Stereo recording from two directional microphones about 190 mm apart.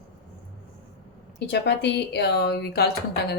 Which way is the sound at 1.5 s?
65° left (ahead or behind).